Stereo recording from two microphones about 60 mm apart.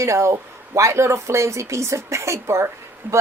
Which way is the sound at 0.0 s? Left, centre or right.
Right.